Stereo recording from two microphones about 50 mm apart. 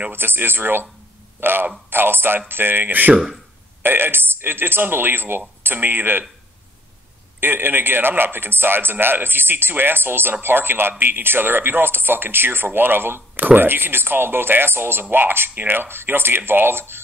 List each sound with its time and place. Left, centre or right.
0.1 s speech: right
3.8 s speech: right
7.3 s speech: right